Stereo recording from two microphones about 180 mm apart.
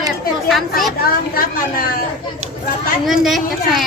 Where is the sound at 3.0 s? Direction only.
Centre (ahead or behind).